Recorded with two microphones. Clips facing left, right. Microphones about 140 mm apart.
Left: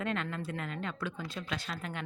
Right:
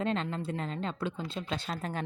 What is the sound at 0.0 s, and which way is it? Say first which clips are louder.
Speech: right 3 dB; 30° right (ahead or behind).